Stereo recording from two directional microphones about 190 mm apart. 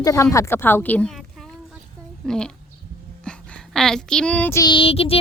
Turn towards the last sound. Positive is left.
turn(degrees=30)  # may be behind; listen again after turning